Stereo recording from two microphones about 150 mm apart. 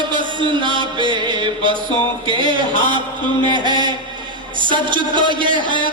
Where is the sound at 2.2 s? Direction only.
35° right (ahead or behind).